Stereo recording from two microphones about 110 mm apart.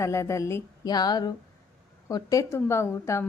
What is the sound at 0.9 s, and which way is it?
A woman's voice, 40° left (ahead or behind).